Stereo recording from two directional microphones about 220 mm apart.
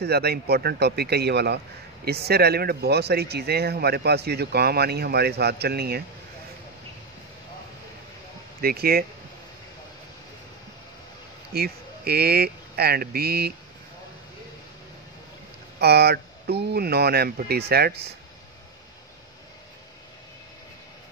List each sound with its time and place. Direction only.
0.0 s speech: 45° right (ahead or behind)
8.5 s speech: 45° right (ahead or behind)
11.5 s speech: 45° right (ahead or behind)
15.8 s speech: 45° right (ahead or behind)